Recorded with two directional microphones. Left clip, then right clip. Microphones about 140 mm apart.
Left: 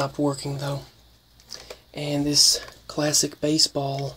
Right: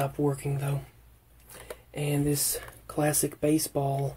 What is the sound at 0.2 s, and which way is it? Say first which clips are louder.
Speech: left 4 dB; 35° left (ahead or behind).